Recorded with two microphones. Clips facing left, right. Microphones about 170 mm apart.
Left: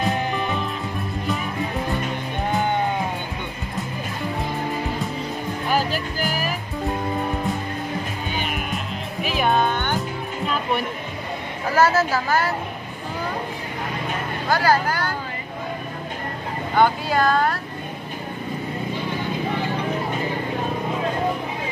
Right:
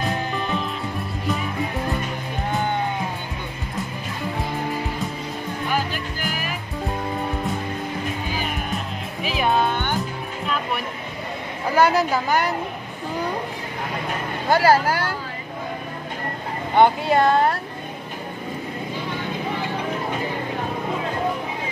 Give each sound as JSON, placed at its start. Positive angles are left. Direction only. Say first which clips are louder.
{"t": 9.2, "sound": "music", "louder": "even", "side_deg": 0}
{"t": 11.7, "sound": "speech", "louder": "even", "side_deg": -15}
{"t": 14.5, "sound": "speech", "louder": "right 3 dB", "side_deg": -25}
{"t": 16.7, "sound": "speech", "louder": "right 3 dB", "side_deg": -25}